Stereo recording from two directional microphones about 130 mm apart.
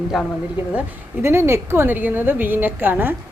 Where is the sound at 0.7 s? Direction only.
20° right (ahead or behind).